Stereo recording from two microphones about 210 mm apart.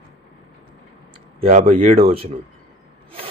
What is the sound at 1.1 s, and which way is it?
Speech, 25° right (ahead or behind).